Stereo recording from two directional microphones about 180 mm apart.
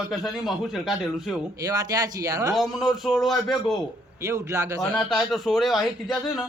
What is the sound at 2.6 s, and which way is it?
Speech, centre (ahead or behind).